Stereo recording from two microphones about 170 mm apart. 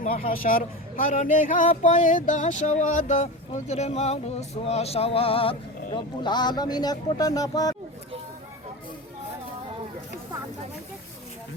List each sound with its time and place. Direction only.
0.2 s a man's voice: 55° left (ahead or behind); by 7.8 s 20° left (ahead or behind)